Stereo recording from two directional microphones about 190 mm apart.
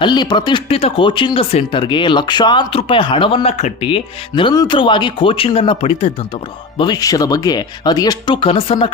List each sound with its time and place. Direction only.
0.0 s speech: 25° left (ahead or behind)